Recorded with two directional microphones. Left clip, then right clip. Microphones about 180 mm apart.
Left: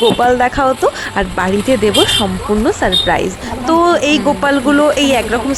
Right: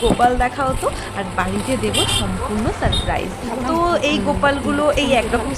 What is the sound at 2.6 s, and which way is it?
Speech, 40° left (ahead or behind).